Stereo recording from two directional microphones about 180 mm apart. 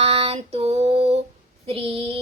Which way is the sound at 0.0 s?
35° right (ahead or behind).